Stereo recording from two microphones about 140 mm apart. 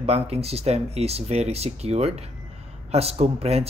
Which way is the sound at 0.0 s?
45° right (ahead or behind).